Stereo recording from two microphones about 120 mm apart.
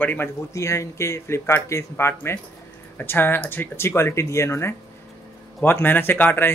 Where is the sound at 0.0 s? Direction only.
15° left (ahead or behind).